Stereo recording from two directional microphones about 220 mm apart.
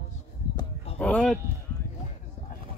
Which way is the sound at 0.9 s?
5° left (ahead or behind).